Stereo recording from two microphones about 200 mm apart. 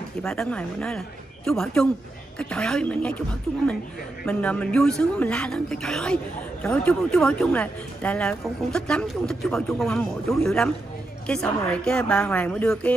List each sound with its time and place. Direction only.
0.2 s speech: 5° left (ahead or behind)
4.2 s speech: 5° left (ahead or behind)